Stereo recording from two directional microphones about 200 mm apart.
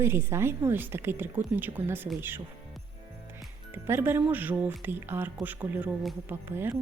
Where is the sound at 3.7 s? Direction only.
10° right (ahead or behind).